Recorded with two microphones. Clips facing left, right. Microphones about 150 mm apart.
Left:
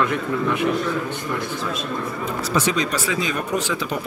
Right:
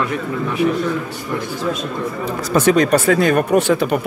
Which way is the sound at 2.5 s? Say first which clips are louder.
Right 10 dB; 55° right (ahead or behind).